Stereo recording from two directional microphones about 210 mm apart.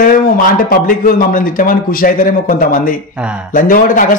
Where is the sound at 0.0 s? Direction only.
45° left (ahead or behind).